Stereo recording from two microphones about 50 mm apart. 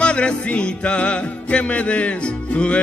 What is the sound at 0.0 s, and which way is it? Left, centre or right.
Music, left.